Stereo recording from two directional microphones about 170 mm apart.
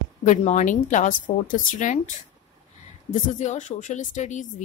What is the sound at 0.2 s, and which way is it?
A woman's voice, 45° left (ahead or behind).